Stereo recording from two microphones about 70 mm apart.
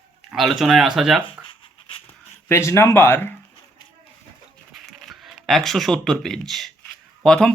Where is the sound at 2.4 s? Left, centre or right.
Left.